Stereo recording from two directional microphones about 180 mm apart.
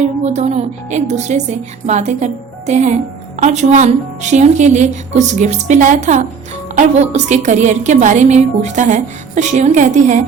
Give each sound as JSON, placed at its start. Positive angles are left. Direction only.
{"t": 0.3, "sound": "a woman's voice", "side_deg": -35}